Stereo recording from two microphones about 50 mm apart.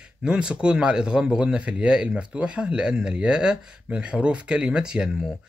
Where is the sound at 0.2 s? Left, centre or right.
Centre.